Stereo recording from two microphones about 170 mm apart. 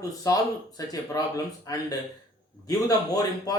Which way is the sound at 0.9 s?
20° left (ahead or behind).